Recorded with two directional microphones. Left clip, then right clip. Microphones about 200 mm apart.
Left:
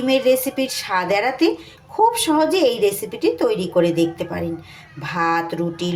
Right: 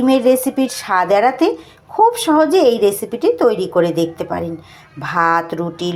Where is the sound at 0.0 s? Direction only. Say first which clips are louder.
Right 4 dB; 15° right (ahead or behind).